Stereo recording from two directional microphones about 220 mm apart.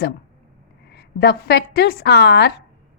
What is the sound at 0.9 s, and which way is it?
Speech, 45° left (ahead or behind).